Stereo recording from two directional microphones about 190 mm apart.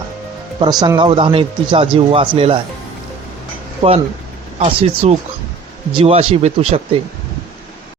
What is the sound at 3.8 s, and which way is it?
Speech, 35° right (ahead or behind).